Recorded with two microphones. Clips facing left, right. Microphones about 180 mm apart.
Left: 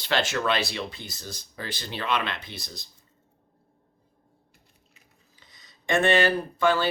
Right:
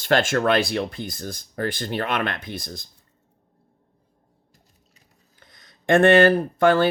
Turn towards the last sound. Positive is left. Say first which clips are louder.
# right 6 dB
turn(degrees=-55)  # may be behind; listen again after turning